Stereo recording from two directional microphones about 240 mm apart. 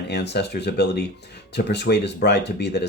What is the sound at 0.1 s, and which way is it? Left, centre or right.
Speech, left.